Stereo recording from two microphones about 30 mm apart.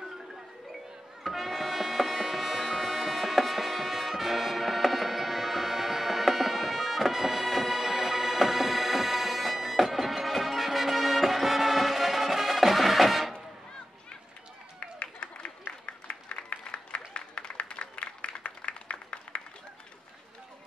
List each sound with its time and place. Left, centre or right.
1.3 s music: centre
15.0 s a sound: left
16.3 s applause: left